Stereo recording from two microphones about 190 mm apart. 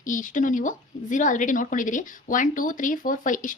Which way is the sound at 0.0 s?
45° left (ahead or behind).